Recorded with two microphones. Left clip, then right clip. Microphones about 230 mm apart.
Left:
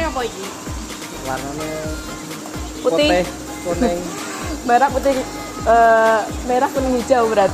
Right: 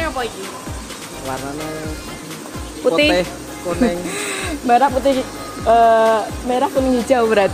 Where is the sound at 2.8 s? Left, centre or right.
Right.